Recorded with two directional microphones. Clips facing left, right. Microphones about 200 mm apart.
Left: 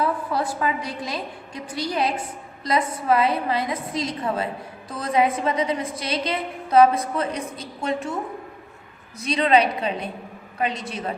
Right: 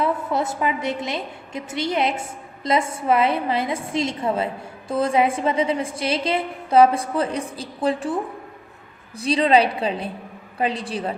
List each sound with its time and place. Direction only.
0.0 s a woman's voice: 25° right (ahead or behind)